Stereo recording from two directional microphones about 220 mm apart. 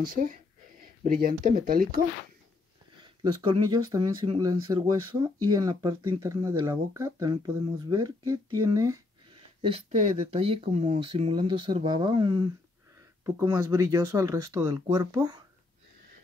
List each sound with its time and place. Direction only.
0.1 s speech: 40° right (ahead or behind)
3.3 s speech: 20° right (ahead or behind)
9.6 s speech: 25° right (ahead or behind)